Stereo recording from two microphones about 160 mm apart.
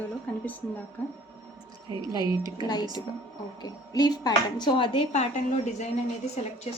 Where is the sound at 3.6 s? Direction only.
25° left (ahead or behind); by 5.9 s 45° left (ahead or behind).